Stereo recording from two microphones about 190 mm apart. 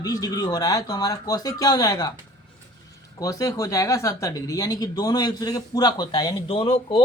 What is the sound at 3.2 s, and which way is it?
Speech, 20° left (ahead or behind).